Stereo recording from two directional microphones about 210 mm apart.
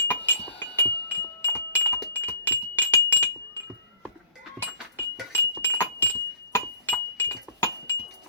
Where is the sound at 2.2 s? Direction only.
10° left (ahead or behind).